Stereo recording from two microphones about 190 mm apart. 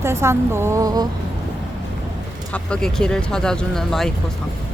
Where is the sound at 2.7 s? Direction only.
5° left (ahead or behind).